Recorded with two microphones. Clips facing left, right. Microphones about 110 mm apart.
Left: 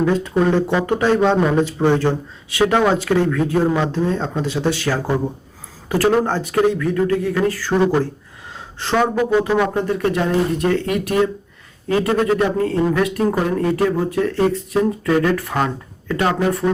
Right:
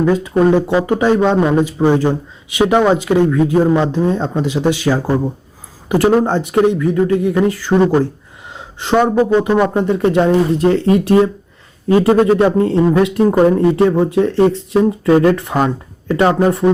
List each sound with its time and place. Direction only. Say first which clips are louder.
0.1 s speech: right 5 dB; 10° right (ahead or behind)
8.5 s a sound: right 5 dB; 15° right (ahead or behind)
9.1 s speech: right 4 dB; 20° right (ahead or behind)